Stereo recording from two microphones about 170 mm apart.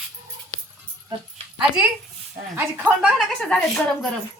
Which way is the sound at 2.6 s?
10° right (ahead or behind).